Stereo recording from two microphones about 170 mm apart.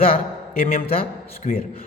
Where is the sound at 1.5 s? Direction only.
45° left (ahead or behind).